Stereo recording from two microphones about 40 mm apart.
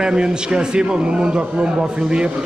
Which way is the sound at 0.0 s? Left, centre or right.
Right.